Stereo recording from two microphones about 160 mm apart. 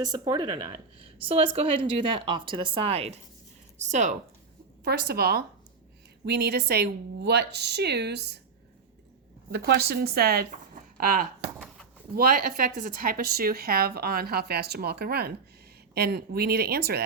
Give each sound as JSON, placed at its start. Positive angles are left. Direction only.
{"t": 0.0, "sound": "speech", "side_deg": -25}
{"t": 4.8, "sound": "speech", "side_deg": -90}
{"t": 6.2, "sound": "a woman's voice", "side_deg": -90}
{"t": 9.5, "sound": "a woman's voice", "side_deg": -90}
{"t": 9.9, "sound": "speech", "side_deg": -80}